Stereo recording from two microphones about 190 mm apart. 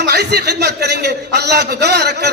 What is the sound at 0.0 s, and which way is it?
A man's voice, 60° right (ahead or behind).